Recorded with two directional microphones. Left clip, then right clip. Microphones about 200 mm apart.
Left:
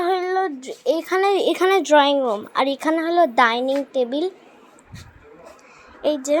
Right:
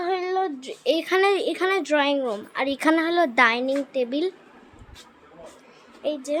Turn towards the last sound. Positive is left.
turn(degrees=25)  # may be behind; listen again after turning